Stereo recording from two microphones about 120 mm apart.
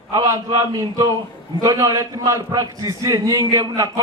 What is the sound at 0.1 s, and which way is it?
A man's voice, 30° right (ahead or behind).